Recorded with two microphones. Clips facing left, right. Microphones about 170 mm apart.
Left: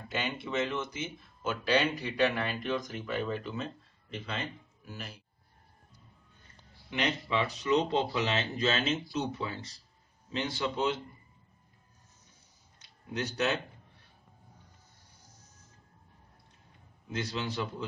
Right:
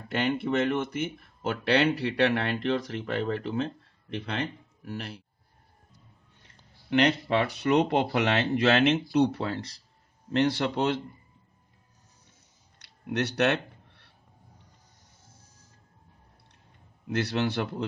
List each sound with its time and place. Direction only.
0.1 s speech: 60° right (ahead or behind)
6.4 s speech: 75° right (ahead or behind)
12.7 s a sound: 75° right (ahead or behind)
17.1 s speech: 70° right (ahead or behind)